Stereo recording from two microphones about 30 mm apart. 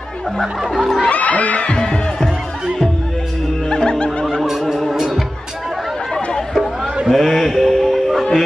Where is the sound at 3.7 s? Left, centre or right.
Left.